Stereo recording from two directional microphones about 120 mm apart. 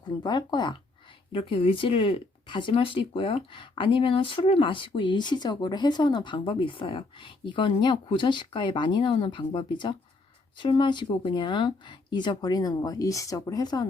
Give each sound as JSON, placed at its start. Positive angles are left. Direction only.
{"t": 0.0, "sound": "speech", "side_deg": 35}
{"t": 1.3, "sound": "speech", "side_deg": 50}